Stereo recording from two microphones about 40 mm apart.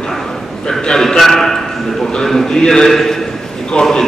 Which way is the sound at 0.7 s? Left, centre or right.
Centre.